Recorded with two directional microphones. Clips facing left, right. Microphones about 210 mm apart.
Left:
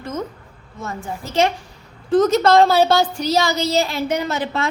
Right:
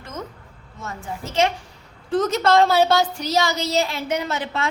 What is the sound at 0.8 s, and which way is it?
Speech, 35° left (ahead or behind).